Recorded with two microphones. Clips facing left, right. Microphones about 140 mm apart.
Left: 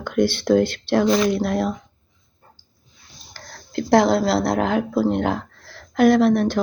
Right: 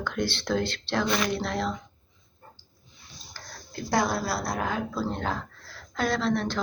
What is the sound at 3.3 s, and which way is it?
Speech, 90° left.